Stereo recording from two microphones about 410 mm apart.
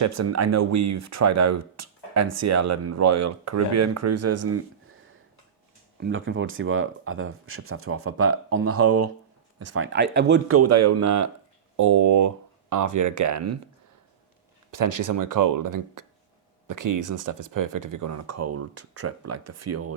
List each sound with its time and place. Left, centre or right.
0.0 s speech: right
6.0 s speech: right
14.7 s speech: right